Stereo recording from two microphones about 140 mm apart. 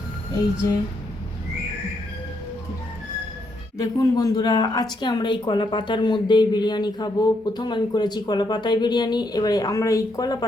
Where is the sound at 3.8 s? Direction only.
25° left (ahead or behind).